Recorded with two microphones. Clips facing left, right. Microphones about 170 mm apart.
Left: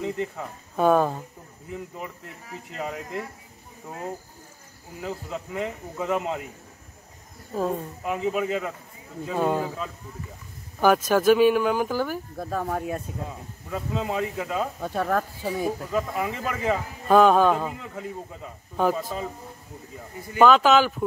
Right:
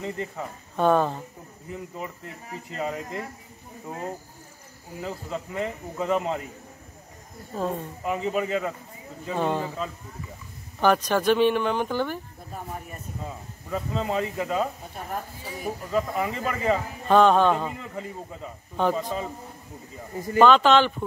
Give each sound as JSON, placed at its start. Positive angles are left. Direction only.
{"t": 0.0, "sound": "speech", "side_deg": 0}
{"t": 5.0, "sound": "speech", "side_deg": 0}
{"t": 7.5, "sound": "speech", "side_deg": 5}
{"t": 11.1, "sound": "speech", "side_deg": 5}
{"t": 12.4, "sound": "speech", "side_deg": 90}
{"t": 13.7, "sound": "speech", "side_deg": 5}
{"t": 14.8, "sound": "speech", "side_deg": 90}
{"t": 15.9, "sound": "speech", "side_deg": 0}
{"t": 20.3, "sound": "speech", "side_deg": 5}